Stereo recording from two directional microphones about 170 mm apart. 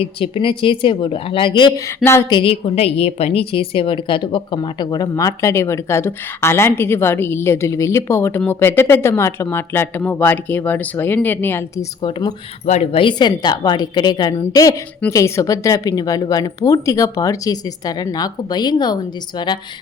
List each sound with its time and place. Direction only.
0.0 s a woman's voice: 30° left (ahead or behind); by 11.9 s 15° left (ahead or behind)
12.6 s a woman's voice: 40° left (ahead or behind); by 18.9 s 25° left (ahead or behind)